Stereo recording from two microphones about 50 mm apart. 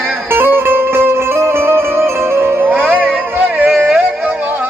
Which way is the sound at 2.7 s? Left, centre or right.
Right.